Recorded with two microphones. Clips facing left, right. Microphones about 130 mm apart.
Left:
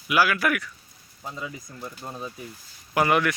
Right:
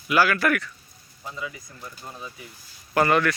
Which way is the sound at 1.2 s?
30° left (ahead or behind).